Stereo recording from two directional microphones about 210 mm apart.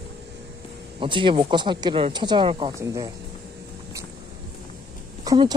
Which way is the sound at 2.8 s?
15° right (ahead or behind).